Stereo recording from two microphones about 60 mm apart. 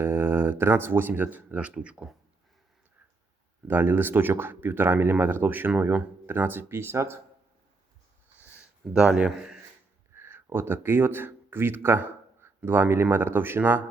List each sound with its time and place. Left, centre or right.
0.0 s speech: right; by 2.0 s centre
3.7 s speech: right
8.9 s speech: centre
10.2 s speech: right